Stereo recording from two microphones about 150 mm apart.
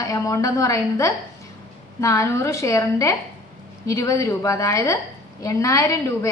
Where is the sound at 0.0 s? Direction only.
20° left (ahead or behind).